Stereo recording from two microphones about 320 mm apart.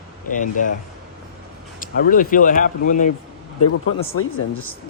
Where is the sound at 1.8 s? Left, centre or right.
Left.